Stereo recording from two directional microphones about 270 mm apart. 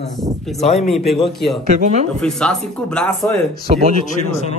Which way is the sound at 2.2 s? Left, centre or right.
Centre.